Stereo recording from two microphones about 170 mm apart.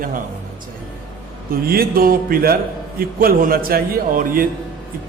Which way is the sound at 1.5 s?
60° right (ahead or behind).